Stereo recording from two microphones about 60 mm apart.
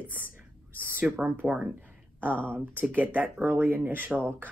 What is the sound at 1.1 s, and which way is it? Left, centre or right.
Speech, right.